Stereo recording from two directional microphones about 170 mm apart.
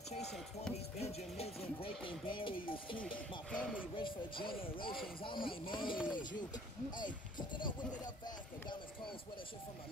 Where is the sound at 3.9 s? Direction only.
30° left (ahead or behind).